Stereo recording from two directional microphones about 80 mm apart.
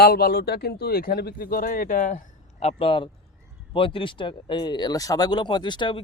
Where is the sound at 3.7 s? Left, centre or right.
Left.